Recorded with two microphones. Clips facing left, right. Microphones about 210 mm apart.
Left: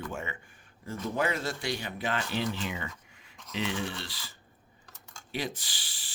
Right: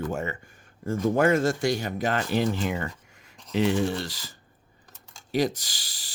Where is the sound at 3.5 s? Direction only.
45° right (ahead or behind).